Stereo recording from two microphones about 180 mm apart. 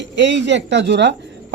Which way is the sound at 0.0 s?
80° right.